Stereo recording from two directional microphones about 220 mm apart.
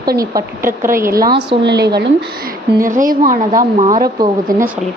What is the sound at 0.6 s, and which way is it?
Speech, 40° right (ahead or behind).